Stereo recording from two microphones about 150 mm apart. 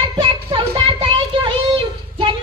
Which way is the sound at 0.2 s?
35° right (ahead or behind).